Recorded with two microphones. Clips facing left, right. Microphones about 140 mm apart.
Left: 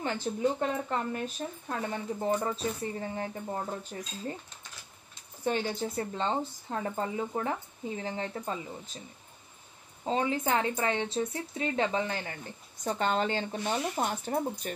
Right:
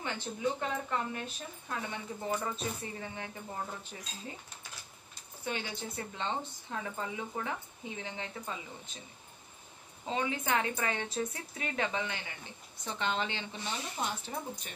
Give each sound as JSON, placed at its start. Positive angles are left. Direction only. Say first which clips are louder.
{"t": 0.0, "sound": "speech", "louder": "left 5 dB", "side_deg": 40}
{"t": 5.4, "sound": "speech", "louder": "left 8 dB", "side_deg": 40}
{"t": 10.0, "sound": "speech", "louder": "left 5 dB", "side_deg": 35}